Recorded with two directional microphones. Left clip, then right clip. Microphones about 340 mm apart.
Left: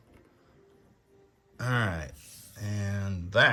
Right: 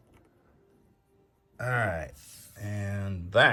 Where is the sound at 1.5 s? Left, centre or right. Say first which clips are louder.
Right 2 dB; centre.